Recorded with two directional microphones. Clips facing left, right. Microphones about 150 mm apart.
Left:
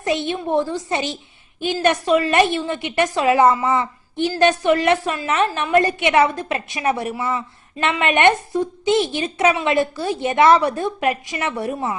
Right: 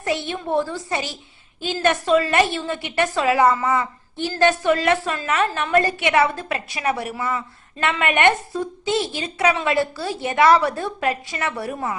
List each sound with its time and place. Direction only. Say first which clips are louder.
0.0 s a woman's voice: left 3 dB; 20° left (ahead or behind)